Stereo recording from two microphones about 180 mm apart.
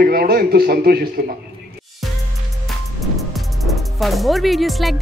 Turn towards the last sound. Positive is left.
turn(degrees=0)  # may be behind; listen again after turning